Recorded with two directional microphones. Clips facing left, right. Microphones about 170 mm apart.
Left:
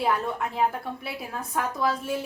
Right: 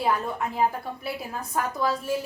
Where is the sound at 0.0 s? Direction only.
Centre (ahead or behind).